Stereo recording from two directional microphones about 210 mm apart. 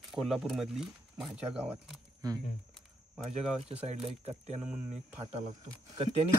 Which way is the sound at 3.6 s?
30° right (ahead or behind).